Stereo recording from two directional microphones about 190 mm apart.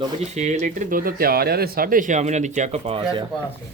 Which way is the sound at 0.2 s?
35° right (ahead or behind).